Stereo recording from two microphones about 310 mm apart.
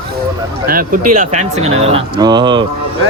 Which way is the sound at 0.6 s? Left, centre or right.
Right.